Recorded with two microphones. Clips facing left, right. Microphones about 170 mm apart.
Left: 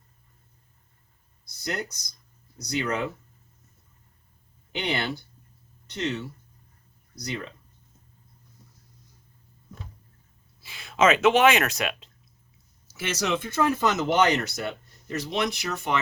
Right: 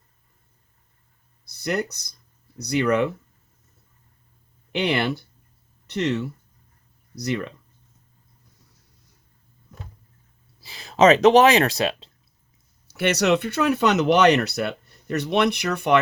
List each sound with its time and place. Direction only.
1.5 s speech: 65° right (ahead or behind)
4.7 s speech: 65° right (ahead or behind)
10.6 s speech: 35° right (ahead or behind)
12.9 s speech: 65° right (ahead or behind)